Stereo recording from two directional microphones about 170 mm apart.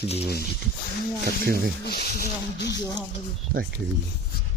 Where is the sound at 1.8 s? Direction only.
65° left (ahead or behind); by 2.8 s 85° left.